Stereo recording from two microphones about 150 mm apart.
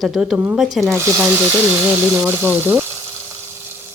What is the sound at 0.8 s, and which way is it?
Speech, 20° right (ahead or behind).